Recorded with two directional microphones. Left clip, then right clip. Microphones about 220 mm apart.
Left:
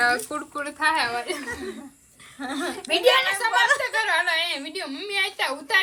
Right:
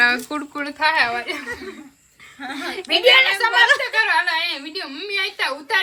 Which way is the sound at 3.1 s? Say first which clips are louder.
Right 6 dB; 45° right (ahead or behind).